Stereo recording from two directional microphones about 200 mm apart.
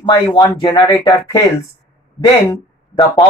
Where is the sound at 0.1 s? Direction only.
15° left (ahead or behind).